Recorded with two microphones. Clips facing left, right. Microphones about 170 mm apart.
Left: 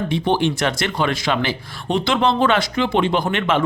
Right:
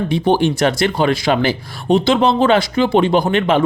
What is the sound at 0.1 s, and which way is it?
Speech, 40° right (ahead or behind).